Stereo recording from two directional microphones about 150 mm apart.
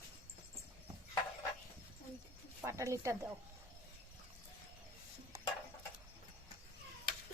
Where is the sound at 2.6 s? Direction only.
20° right (ahead or behind).